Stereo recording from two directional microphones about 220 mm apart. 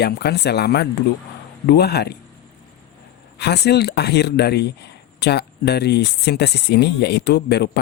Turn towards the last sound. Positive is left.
turn(degrees=50)  # may be behind; listen again after turning